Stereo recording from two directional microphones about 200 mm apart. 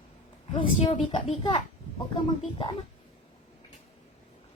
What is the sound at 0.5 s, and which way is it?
A woman's voice, 25° left (ahead or behind).